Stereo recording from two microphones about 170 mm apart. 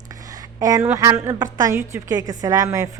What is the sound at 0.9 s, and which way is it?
Speech, 15° right (ahead or behind).